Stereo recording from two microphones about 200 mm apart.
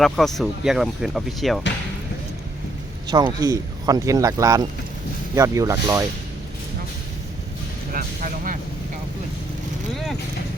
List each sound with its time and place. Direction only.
0.0 s speech: centre (ahead or behind)
3.1 s speech: 20° right (ahead or behind)
7.9 s speech: 45° right (ahead or behind)
9.9 s speech: centre (ahead or behind)